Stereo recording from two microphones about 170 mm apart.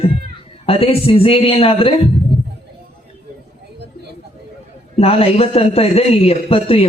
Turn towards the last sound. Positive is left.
turn(degrees=35)  # may be behind; listen again after turning